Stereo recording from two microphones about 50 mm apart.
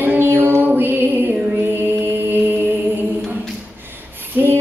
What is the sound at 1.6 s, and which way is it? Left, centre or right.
Mantra, right.